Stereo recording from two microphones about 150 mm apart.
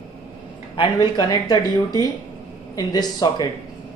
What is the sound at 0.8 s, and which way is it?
A woman's voice, 25° left (ahead or behind).